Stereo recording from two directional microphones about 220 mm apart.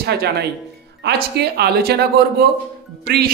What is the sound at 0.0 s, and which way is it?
A woman's voice, 50° right (ahead or behind).